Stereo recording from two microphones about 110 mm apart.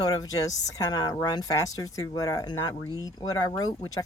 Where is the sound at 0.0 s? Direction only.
35° left (ahead or behind).